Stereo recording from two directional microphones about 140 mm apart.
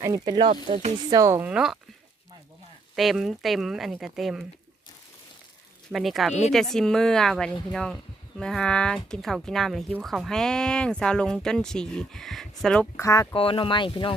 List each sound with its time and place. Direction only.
0.0 s speech: 25° right (ahead or behind)
1.1 s speech: 25° right (ahead or behind)
1.4 s speech: 5° right (ahead or behind)
2.9 s speech: centre (ahead or behind)
5.9 s speech: centre (ahead or behind)
13.0 s speech: 20° left (ahead or behind)
13.3 s speech: 40° left (ahead or behind)